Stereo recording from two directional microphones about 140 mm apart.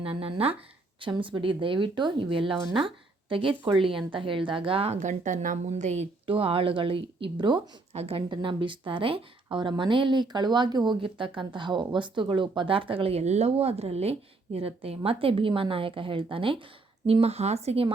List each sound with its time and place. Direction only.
0.0 s speech: 40° right (ahead or behind)
4.9 s a woman's voice: 60° right (ahead or behind)
6.2 s speech: 40° right (ahead or behind)